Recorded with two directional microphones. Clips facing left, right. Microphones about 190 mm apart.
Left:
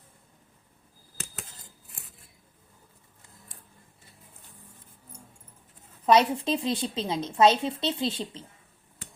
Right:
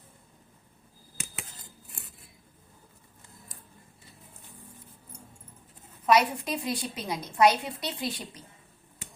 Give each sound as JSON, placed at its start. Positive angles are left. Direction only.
{"t": 1.1, "sound": "cutlery", "side_deg": -10}
{"t": 6.1, "sound": "a woman's voice", "side_deg": 25}